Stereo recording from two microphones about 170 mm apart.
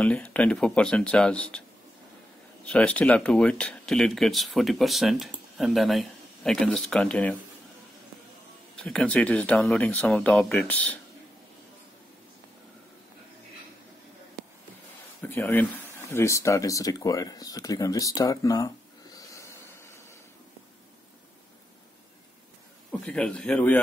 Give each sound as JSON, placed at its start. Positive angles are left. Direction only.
{"t": 0.0, "sound": "speech", "side_deg": 10}
{"t": 2.6, "sound": "speech", "side_deg": 10}
{"t": 8.7, "sound": "speech", "side_deg": 5}
{"t": 15.2, "sound": "speech", "side_deg": 10}
{"t": 19.1, "sound": "a sound", "side_deg": 15}
{"t": 22.8, "sound": "speech", "side_deg": 10}